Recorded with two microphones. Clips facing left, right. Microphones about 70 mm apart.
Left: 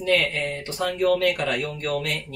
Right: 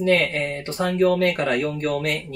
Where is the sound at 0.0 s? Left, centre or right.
Right.